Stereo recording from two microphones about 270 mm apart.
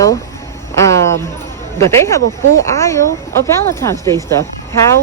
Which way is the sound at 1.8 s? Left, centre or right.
Centre.